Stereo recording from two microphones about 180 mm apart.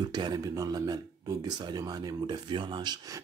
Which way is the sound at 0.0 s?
25° right (ahead or behind).